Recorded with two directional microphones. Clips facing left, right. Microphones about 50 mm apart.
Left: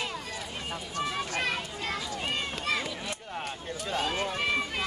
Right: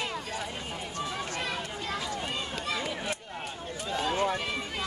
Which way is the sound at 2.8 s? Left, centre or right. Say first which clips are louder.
Right 3 dB; right.